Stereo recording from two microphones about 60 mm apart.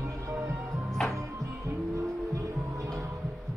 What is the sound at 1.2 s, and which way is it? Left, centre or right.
Music, right.